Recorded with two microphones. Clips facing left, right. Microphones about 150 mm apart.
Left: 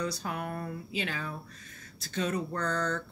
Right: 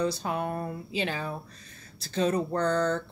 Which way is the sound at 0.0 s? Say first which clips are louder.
Right 5 dB; 25° right (ahead or behind).